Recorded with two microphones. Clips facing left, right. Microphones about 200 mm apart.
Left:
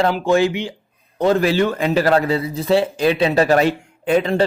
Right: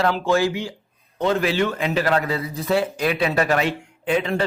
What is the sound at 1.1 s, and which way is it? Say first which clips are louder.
A man's voice: left 4 dB; 40° left (ahead or behind).